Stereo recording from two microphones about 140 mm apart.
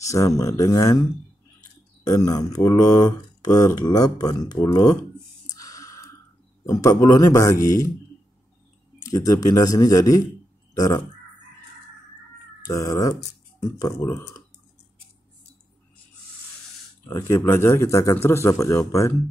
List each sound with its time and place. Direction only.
0.0 s speech: 25° left (ahead or behind)
2.0 s speech: 25° left (ahead or behind)
5.5 s a sound: 25° left (ahead or behind)
6.6 s speech: 20° left (ahead or behind)
9.1 s speech: 25° left (ahead or behind)
12.6 s speech: 25° left (ahead or behind)
17.1 s speech: 20° left (ahead or behind)